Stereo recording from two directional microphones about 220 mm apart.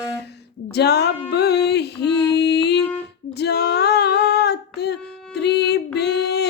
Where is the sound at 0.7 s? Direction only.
50° left (ahead or behind).